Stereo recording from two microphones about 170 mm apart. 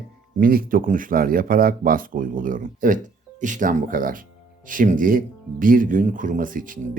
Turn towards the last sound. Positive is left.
turn(degrees=-55)  # may be behind; listen again after turning